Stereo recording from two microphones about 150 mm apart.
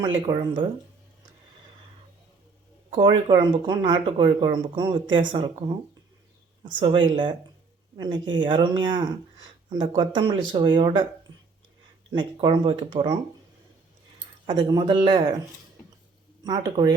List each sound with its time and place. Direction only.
0.0 s speech: 30° right (ahead or behind)
2.9 s speech: 35° right (ahead or behind)
6.7 s speech: 30° right (ahead or behind)
12.1 s speech: 35° right (ahead or behind)
14.4 s speech: 30° right (ahead or behind)
16.4 s speech: 25° right (ahead or behind)